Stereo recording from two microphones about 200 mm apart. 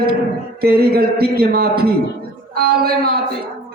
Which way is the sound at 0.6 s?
50° right (ahead or behind).